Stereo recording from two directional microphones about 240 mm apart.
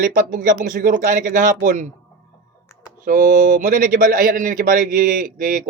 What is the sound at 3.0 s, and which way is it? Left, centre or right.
A man's voice, right.